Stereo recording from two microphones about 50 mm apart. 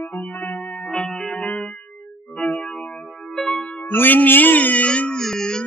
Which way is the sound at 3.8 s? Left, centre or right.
Left.